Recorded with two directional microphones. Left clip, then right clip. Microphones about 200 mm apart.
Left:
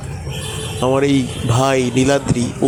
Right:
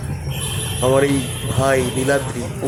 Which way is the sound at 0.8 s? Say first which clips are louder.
Left 1 dB; 35° left (ahead or behind).